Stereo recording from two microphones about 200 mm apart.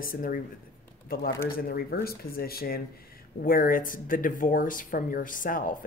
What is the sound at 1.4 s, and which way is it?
Speech, 45° left (ahead or behind).